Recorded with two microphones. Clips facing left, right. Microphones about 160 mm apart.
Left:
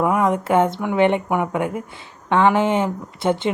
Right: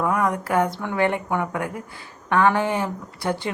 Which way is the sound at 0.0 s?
20° left (ahead or behind).